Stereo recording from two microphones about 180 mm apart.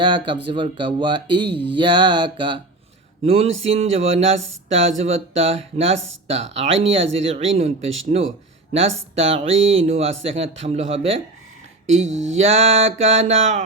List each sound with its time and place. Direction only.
0.0 s a man's voice: 25° right (ahead or behind)
12.0 s mantra: 90° right
12.4 s speech: 35° right (ahead or behind)